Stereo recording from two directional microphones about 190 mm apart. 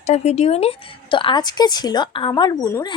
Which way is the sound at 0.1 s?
35° left (ahead or behind).